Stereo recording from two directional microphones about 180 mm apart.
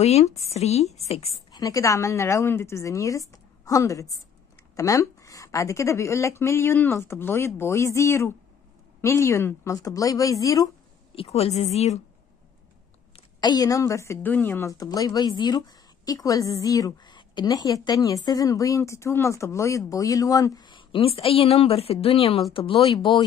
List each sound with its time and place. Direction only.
0.0 s a woman's voice: 35° left (ahead or behind)
1.5 s a woman's voice: 20° left (ahead or behind)
11.1 s a woman's voice: 35° left (ahead or behind)
13.1 s a woman's voice: 25° left (ahead or behind)